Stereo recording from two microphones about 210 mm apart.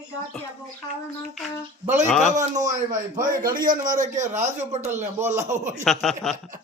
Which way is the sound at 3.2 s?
40° right (ahead or behind).